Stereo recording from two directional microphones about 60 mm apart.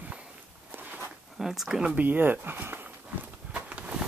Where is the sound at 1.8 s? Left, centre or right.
Right.